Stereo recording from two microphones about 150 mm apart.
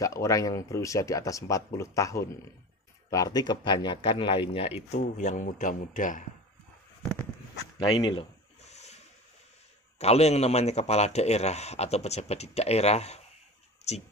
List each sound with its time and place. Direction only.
0.0 s a man's voice: 20° left (ahead or behind); by 6.2 s 60° left (ahead or behind)
7.8 s a man's voice: 30° left (ahead or behind)
8.6 s a sound: 50° left (ahead or behind)
9.9 s a man's voice: 45° left (ahead or behind)